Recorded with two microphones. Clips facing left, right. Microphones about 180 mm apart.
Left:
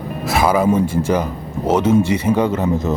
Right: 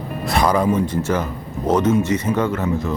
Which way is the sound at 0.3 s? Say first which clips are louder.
Left 2 dB; 5° left (ahead or behind).